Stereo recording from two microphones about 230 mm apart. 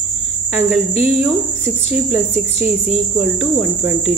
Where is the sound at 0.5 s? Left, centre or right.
Centre.